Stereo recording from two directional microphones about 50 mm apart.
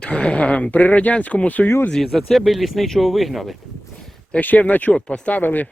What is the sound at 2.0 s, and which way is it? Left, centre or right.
Speech, centre.